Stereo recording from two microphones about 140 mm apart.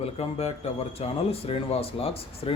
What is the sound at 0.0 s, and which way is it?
A man's voice, 45° left (ahead or behind).